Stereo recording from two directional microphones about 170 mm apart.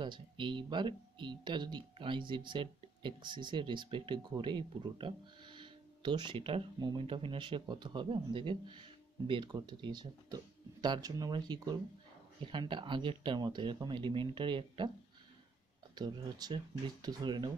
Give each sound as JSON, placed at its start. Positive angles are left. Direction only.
{"t": 0.0, "sound": "speech", "side_deg": -30}
{"t": 15.9, "sound": "speech", "side_deg": -25}